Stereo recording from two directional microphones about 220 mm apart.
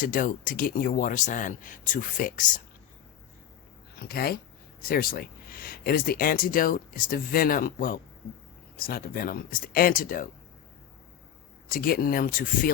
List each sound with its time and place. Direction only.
0.0 s speech: 40° left (ahead or behind)
3.9 s speech: 45° left (ahead or behind)
11.7 s speech: 40° left (ahead or behind)